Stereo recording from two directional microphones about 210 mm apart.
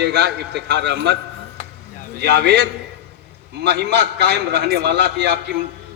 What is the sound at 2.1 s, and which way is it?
A man's voice, 50° right (ahead or behind).